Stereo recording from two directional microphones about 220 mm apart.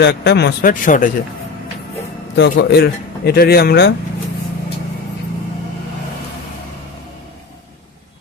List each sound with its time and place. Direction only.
0.0 s a man's voice: 50° left (ahead or behind)
2.3 s a man's voice: 55° left (ahead or behind)